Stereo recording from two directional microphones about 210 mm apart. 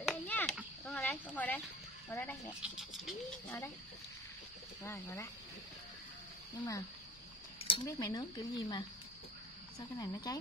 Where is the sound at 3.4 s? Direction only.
15° left (ahead or behind).